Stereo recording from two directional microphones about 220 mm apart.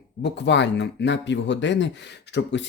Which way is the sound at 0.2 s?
50° left (ahead or behind).